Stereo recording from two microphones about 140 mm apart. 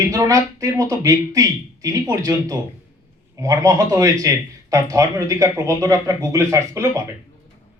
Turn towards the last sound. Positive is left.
turn(degrees=-20)  # may be behind; listen again after turning